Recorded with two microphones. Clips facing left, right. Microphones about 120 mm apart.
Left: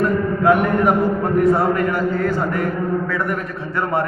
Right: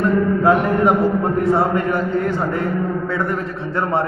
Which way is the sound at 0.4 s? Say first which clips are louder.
Left 1 dB; 25° right (ahead or behind).